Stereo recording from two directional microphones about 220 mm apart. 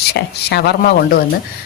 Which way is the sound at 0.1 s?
50° left (ahead or behind).